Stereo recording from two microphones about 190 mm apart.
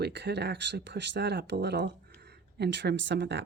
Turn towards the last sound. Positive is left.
turn(degrees=-65)  # may be behind; listen again after turning